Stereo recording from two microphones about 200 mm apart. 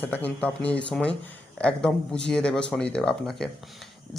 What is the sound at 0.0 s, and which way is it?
Speech, 10° left (ahead or behind).